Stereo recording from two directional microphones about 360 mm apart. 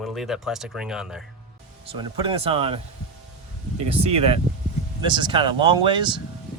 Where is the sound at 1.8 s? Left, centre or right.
Centre.